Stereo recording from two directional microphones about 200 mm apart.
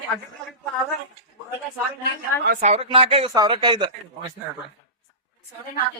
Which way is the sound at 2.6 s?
30° right (ahead or behind).